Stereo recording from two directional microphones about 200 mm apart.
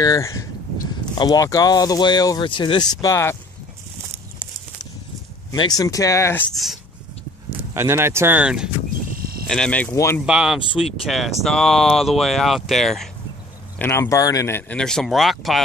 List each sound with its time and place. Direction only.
0.0 s speech: 15° left (ahead or behind)
5.5 s speech: 20° left (ahead or behind)
6.5 s speech: centre (ahead or behind)
7.7 s speech: 10° right (ahead or behind)
9.5 s speech: 5° left (ahead or behind)
10.2 s speech: 5° right (ahead or behind)
13.7 s speech: 10° left (ahead or behind)